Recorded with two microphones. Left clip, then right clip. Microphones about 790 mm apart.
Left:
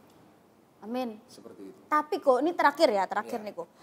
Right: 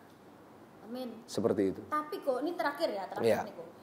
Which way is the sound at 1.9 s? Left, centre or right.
Left.